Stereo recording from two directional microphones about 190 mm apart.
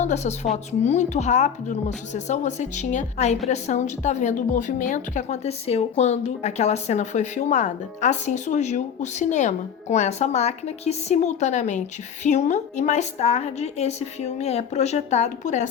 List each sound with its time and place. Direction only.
0.0 s a woman's voice: 35° left (ahead or behind)